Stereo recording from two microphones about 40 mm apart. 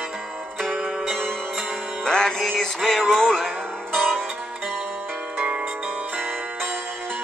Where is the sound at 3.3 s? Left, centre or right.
Centre.